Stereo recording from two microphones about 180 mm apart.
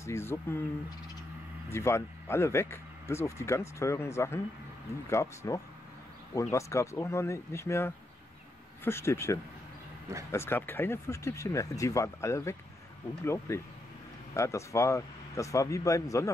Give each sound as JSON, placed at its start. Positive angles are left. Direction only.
{"t": 0.0, "sound": "speech", "side_deg": 15}
{"t": 1.7, "sound": "speech", "side_deg": 15}